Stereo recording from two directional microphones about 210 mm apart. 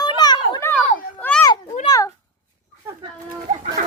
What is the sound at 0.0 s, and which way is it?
Children playing, 20° left (ahead or behind).